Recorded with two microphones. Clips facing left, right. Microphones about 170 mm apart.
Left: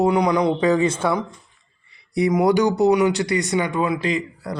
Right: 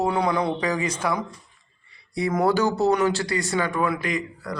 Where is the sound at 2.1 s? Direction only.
15° left (ahead or behind).